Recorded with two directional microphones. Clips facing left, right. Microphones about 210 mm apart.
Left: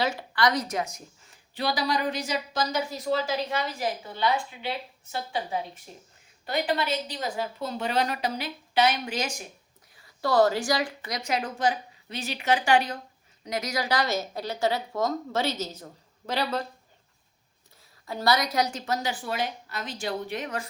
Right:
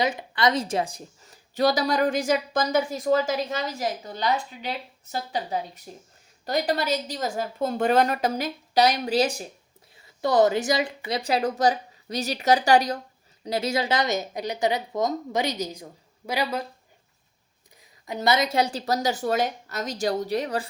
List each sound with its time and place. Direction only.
0.0 s a woman's voice: 20° right (ahead or behind); by 9.5 s 35° right (ahead or behind)
10.2 s speech: 20° right (ahead or behind)
11.1 s a woman's voice: 35° right (ahead or behind); by 16.6 s 10° right (ahead or behind)
17.7 s a woman's voice: 15° right (ahead or behind); by 20.7 s 35° right (ahead or behind)